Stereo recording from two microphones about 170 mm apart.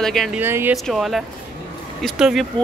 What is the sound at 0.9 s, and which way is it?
Speech, centre (ahead or behind).